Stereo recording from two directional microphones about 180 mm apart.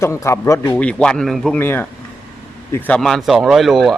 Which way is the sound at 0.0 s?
15° left (ahead or behind).